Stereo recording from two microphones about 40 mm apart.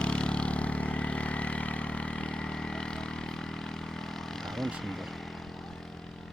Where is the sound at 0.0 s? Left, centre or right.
Left.